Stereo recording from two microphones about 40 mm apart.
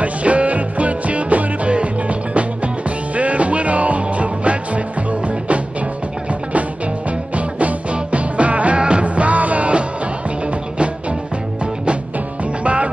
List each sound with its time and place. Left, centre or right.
0.0 s music: right
7.3 s music: right
12.6 s music: right